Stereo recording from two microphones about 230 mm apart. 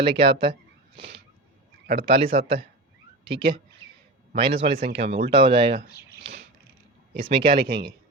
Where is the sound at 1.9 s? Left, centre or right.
Right.